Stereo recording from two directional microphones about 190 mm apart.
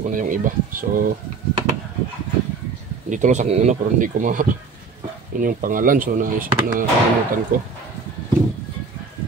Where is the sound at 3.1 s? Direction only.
40° right (ahead or behind).